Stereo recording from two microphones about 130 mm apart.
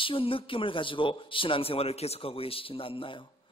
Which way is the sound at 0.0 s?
45° left (ahead or behind).